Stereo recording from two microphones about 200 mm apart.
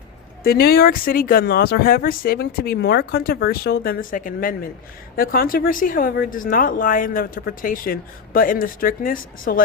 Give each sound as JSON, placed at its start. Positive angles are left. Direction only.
{"t": 0.4, "sound": "speech", "side_deg": 50}